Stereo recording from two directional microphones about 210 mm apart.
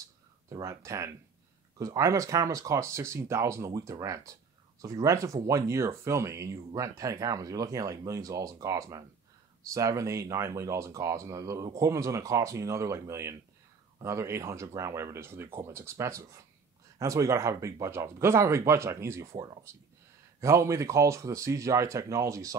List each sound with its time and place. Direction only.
0.5 s speech: 15° right (ahead or behind)